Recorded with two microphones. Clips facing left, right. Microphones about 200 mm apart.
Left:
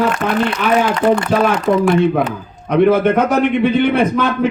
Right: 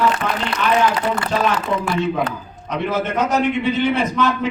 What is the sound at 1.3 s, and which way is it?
Speech, 60° left (ahead or behind).